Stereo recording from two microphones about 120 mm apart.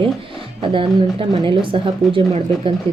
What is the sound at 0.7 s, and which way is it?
Speech, 50° right (ahead or behind).